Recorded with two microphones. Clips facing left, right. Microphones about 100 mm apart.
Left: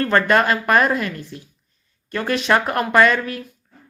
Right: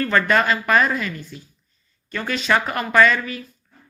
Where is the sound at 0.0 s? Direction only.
Centre (ahead or behind).